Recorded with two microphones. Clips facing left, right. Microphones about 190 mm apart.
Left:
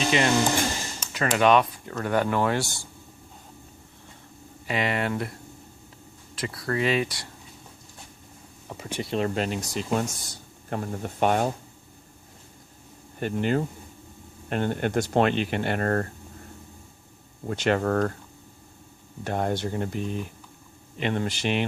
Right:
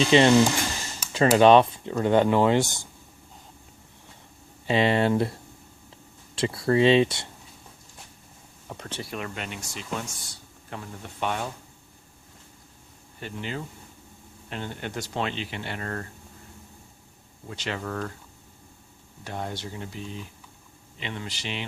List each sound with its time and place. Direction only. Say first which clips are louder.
0.1 s speech: right 7 dB; 30° right (ahead or behind)
1.0 s a sound: right 1 dB; 10° right (ahead or behind)
1.4 s speech: right 3 dB; 30° right (ahead or behind)
4.6 s speech: right 5 dB; 30° right (ahead or behind)
6.3 s speech: right 6 dB; 25° right (ahead or behind)
8.7 s speech: left 2 dB; 5° left (ahead or behind)
9.0 s speech: left 9 dB; 25° left (ahead or behind); by 11.5 s 45° left (ahead or behind)
13.1 s speech: left 9 dB; 50° left (ahead or behind)
17.4 s speech: left 9 dB; 50° left (ahead or behind)
19.2 s speech: left 7 dB; 55° left (ahead or behind)